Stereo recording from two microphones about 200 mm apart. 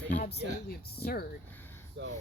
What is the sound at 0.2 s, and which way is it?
Speech, 50° left (ahead or behind).